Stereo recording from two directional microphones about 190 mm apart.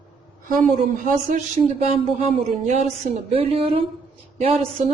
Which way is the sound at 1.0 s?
45° right (ahead or behind).